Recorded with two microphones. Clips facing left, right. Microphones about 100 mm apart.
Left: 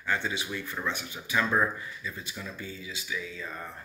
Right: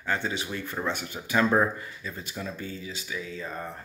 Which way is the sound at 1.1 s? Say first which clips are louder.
Right 5 dB; 45° right (ahead or behind).